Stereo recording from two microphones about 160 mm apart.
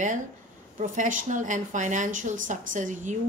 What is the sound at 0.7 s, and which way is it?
A woman's voice, 55° right (ahead or behind).